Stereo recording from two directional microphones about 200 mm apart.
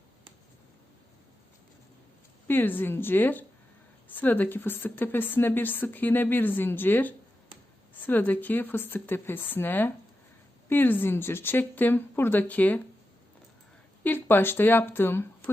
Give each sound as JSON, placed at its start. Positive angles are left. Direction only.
{"t": 2.5, "sound": "a woman's voice", "side_deg": 10}
{"t": 14.0, "sound": "a woman's voice", "side_deg": 10}